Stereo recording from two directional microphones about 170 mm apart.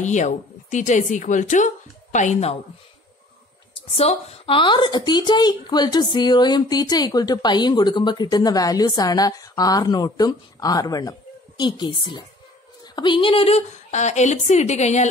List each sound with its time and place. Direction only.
0.0 s a woman's voice: 45° left (ahead or behind)
3.9 s speech: 35° left (ahead or behind)